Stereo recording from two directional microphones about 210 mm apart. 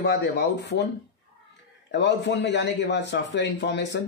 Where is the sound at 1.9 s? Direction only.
55° left (ahead or behind).